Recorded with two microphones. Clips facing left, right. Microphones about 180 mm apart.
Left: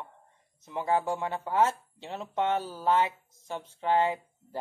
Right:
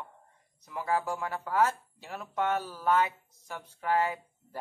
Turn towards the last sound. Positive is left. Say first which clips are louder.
# left 4 dB
turn(degrees=25)  # may be behind; listen again after turning